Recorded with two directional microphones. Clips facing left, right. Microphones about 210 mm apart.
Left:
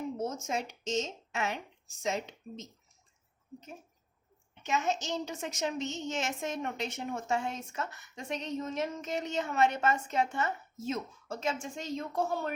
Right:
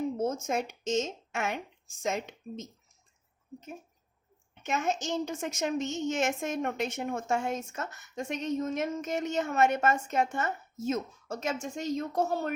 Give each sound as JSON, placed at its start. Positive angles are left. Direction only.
{"t": 0.2, "sound": "a woman's voice", "side_deg": -50}
{"t": 4.6, "sound": "a woman's voice", "side_deg": -55}